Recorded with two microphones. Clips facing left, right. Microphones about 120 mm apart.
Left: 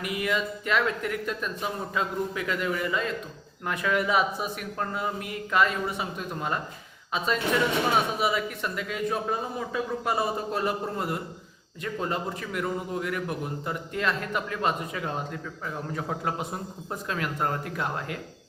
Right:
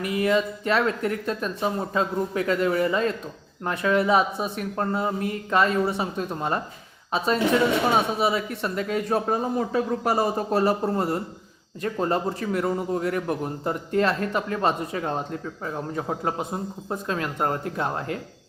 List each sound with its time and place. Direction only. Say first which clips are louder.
0.0 s a man's voice: right 6 dB; 30° right (ahead or behind)
8.2 s a man's voice: right 3 dB; 30° right (ahead or behind)